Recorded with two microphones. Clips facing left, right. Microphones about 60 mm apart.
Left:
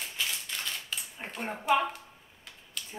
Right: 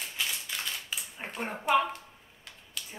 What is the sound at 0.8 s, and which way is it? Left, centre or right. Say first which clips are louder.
A woman's voice: right 1 dB; centre.